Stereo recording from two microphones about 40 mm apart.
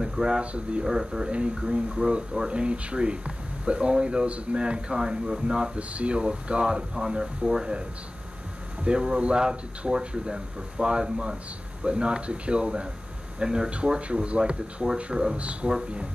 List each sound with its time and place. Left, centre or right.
0.0 s a sound: centre
0.4 s speech: right
0.8 s speech: centre
8.8 s speech: right